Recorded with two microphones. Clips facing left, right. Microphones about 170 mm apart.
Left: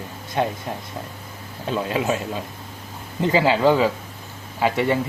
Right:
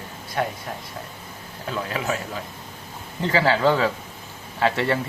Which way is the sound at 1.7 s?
25° left (ahead or behind).